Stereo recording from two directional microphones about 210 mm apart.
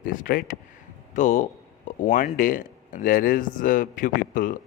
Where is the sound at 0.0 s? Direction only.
40° left (ahead or behind).